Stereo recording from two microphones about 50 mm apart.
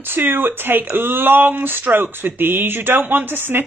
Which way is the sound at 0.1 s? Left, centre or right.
Right.